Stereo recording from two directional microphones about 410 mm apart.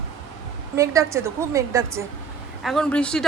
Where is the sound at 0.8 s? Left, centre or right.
Centre.